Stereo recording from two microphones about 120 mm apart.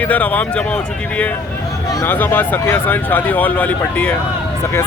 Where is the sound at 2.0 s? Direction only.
15° left (ahead or behind).